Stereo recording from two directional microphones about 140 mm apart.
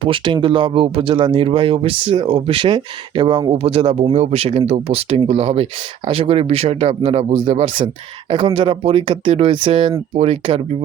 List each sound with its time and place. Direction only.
0.0 s speech: 40° right (ahead or behind)